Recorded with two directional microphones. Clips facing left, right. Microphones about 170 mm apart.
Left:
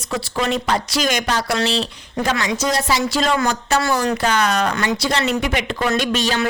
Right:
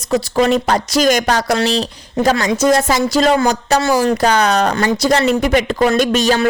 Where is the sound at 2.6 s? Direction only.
50° right (ahead or behind).